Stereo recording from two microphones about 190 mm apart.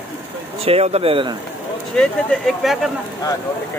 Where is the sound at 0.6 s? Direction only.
30° right (ahead or behind).